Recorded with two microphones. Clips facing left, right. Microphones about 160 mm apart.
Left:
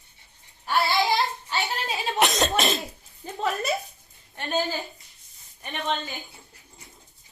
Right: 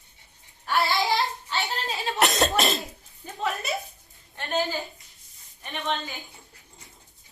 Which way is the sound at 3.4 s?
40° left (ahead or behind).